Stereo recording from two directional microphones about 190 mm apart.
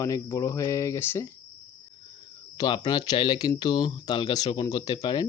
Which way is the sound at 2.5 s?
20° left (ahead or behind).